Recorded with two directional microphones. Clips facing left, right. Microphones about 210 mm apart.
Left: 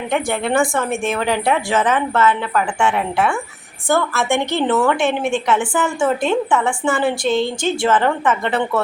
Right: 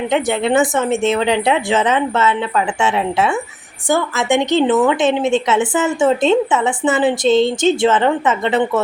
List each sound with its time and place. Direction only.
0.1 s a woman's voice: 20° right (ahead or behind)